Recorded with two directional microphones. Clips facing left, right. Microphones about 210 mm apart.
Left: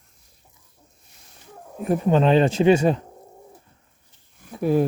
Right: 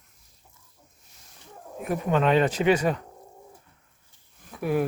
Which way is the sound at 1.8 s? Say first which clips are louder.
Left 5 dB; 30° left (ahead or behind).